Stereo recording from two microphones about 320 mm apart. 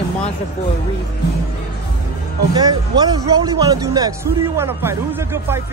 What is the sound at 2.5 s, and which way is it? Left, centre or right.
Speech, centre.